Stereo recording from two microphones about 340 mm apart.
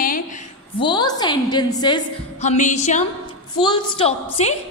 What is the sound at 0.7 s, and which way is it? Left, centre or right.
A woman's voice, centre.